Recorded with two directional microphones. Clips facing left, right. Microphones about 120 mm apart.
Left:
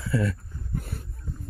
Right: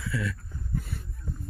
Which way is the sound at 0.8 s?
55° left (ahead or behind).